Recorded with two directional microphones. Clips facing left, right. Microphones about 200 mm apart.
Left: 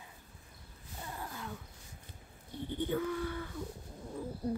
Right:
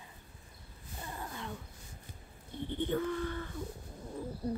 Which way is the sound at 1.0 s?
Centre (ahead or behind).